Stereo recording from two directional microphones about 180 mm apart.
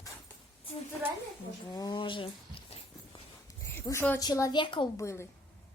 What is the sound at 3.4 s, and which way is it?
A woman's voice, 15° left (ahead or behind).